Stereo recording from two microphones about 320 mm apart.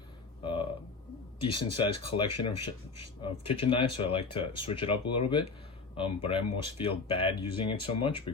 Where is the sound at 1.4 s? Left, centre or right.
Centre.